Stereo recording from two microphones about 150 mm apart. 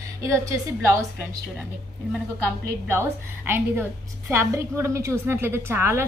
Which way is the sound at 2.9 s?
15° right (ahead or behind).